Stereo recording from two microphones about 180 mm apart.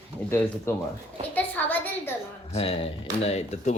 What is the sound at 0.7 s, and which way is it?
Speech, 15° left (ahead or behind).